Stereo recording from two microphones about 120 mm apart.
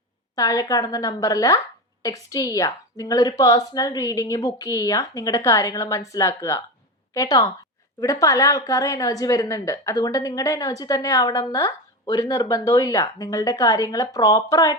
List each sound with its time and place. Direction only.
0.3 s a woman's voice: 30° left (ahead or behind)